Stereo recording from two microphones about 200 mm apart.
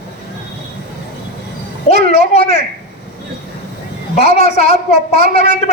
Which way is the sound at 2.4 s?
45° right (ahead or behind).